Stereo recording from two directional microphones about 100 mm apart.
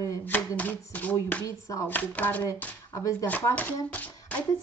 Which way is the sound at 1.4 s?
30° left (ahead or behind).